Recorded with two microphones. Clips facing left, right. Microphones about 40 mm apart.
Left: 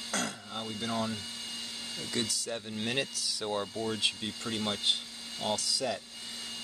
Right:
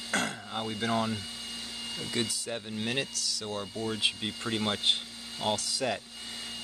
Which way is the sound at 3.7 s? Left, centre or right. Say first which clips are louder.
Right 1 dB; centre.